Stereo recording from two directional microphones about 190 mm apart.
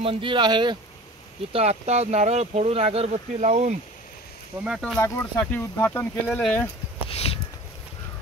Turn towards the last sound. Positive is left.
turn(degrees=30)  # may be behind; listen again after turning